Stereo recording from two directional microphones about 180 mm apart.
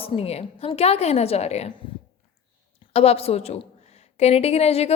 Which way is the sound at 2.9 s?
35° left (ahead or behind).